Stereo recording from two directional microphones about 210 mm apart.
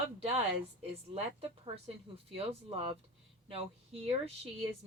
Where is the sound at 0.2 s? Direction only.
30° right (ahead or behind).